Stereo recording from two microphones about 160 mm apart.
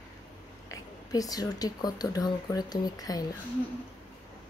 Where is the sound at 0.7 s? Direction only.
20° left (ahead or behind).